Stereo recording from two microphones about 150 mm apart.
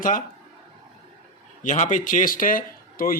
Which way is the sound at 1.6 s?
55° left (ahead or behind).